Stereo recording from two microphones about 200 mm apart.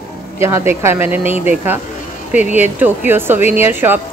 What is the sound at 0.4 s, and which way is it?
Speech, 15° right (ahead or behind).